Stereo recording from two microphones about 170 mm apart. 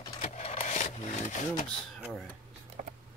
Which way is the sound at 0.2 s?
40° left (ahead or behind).